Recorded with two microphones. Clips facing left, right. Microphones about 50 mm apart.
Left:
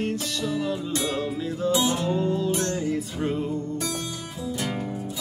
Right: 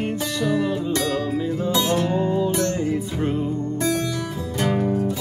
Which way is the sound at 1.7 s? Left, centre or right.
Right.